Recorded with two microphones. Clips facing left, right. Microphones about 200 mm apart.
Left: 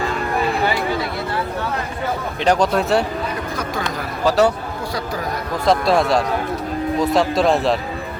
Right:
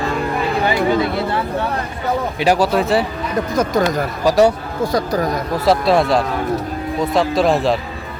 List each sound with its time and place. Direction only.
2.4 s speech: 5° right (ahead or behind)
3.5 s speech: 45° right (ahead or behind)
4.2 s speech: 10° right (ahead or behind)
4.9 s speech: 45° right (ahead or behind)
5.6 s speech: centre (ahead or behind)